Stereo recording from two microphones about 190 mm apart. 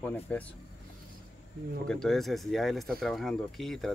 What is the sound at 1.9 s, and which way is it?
Speech, 5° left (ahead or behind).